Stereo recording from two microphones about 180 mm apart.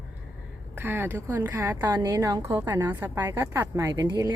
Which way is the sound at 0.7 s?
10° right (ahead or behind).